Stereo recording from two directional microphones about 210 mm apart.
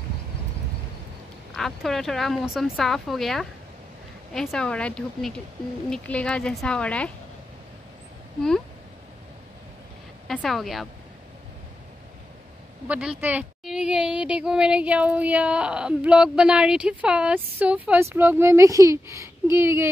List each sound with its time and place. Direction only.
1.5 s a woman's voice: centre (ahead or behind)
8.4 s a woman's voice: 5° left (ahead or behind)
10.2 s a woman's voice: centre (ahead or behind)
12.8 s a woman's voice: 5° right (ahead or behind)